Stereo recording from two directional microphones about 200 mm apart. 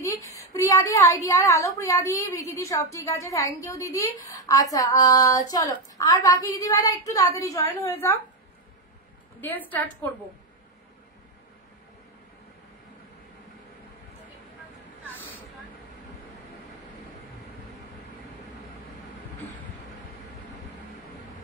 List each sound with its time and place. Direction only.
0.0 s a woman's voice: 15° left (ahead or behind)
9.4 s a woman's voice: 10° left (ahead or behind)
15.0 s a sound: 10° left (ahead or behind)